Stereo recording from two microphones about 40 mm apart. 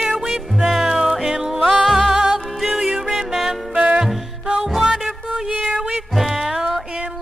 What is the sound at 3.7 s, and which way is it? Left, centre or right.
Music, right.